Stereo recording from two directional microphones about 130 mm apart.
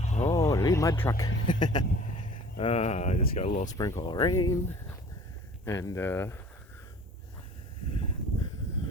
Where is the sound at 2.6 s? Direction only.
50° left (ahead or behind).